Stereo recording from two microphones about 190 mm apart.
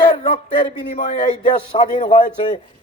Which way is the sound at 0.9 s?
45° left (ahead or behind).